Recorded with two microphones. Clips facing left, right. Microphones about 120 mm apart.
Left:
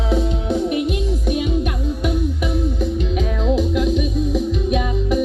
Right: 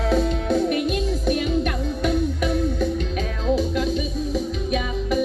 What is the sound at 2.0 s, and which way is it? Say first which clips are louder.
Music: right 1 dB; 15° left (ahead or behind).